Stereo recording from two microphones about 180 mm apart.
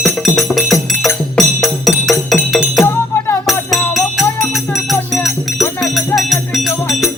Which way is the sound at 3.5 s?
Centre (ahead or behind).